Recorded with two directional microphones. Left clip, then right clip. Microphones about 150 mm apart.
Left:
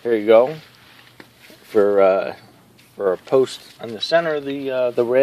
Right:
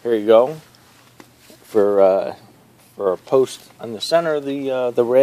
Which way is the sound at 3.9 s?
35° right (ahead or behind).